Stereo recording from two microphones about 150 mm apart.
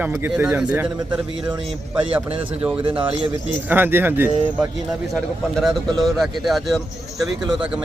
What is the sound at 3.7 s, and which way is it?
Speech, 15° right (ahead or behind).